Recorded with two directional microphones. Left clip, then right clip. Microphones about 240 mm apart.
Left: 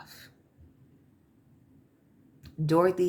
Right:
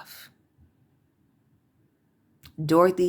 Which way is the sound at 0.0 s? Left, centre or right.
Right.